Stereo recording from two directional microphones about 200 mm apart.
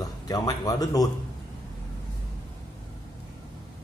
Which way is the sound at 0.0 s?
15° left (ahead or behind).